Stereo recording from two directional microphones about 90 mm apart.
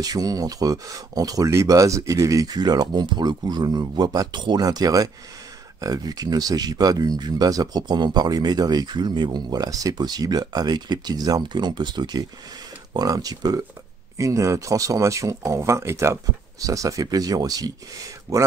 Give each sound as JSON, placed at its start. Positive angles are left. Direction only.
{"t": 0.0, "sound": "speech", "side_deg": -45}